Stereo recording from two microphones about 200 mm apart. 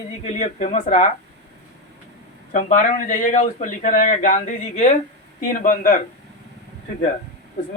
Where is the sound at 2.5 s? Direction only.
40° left (ahead or behind).